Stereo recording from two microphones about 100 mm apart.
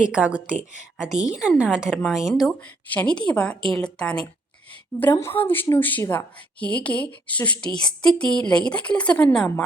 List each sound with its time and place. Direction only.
0.0 s a woman's voice: 10° right (ahead or behind)
2.3 s speech: 5° left (ahead or behind)
5.1 s a woman's voice: 25° left (ahead or behind)